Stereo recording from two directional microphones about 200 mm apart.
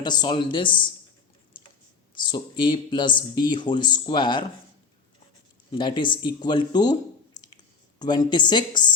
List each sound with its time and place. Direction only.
0.0 s speech: 20° left (ahead or behind)
2.1 s speech: 25° left (ahead or behind)
5.7 s speech: 25° left (ahead or behind)
7.4 s squish: 20° left (ahead or behind)